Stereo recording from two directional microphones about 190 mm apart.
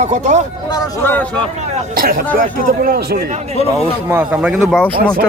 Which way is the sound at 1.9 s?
50° right (ahead or behind).